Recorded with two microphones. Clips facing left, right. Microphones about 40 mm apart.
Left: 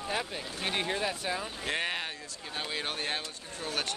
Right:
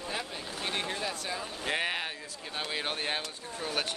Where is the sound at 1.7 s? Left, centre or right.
Centre.